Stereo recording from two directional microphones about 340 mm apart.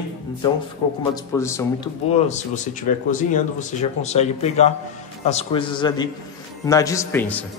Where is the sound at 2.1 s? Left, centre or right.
Left; by 7.4 s centre.